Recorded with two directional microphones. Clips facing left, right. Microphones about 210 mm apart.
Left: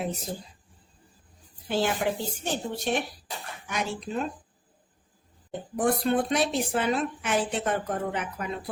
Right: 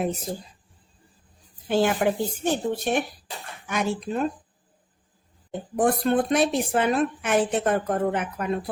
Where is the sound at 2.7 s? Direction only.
55° right (ahead or behind).